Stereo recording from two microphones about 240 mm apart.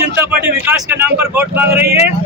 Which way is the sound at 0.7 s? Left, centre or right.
Centre.